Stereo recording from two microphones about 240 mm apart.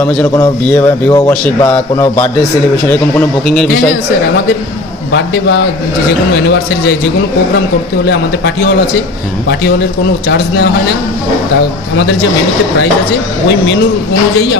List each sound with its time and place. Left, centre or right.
0.0 s a man's voice: centre
3.2 s a man's voice: centre